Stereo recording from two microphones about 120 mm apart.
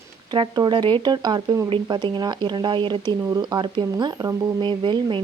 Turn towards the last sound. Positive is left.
turn(degrees=-40)  # may be behind; listen again after turning